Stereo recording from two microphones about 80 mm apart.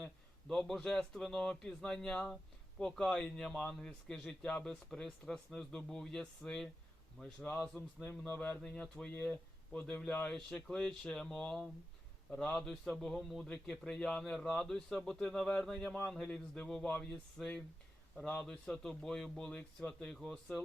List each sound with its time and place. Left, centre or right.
0.0 s a man's voice: centre
8.3 s speech: left
8.6 s a man's voice: centre